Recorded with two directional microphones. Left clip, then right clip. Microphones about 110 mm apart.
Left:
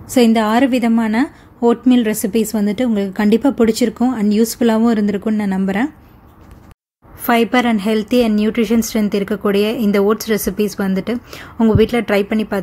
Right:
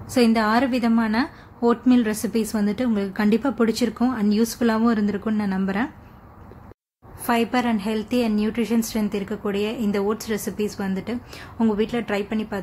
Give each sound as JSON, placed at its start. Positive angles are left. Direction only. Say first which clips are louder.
{"t": 0.1, "sound": "a woman's voice", "louder": "left 6 dB", "side_deg": 35}
{"t": 7.2, "sound": "a woman's voice", "louder": "left 7 dB", "side_deg": 40}
{"t": 11.7, "sound": "a woman's voice", "louder": "left 12 dB", "side_deg": 50}